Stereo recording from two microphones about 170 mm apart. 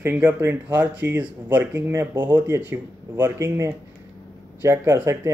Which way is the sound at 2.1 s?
25° right (ahead or behind).